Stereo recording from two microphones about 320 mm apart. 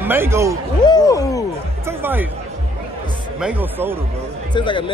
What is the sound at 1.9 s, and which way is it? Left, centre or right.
Speech, centre.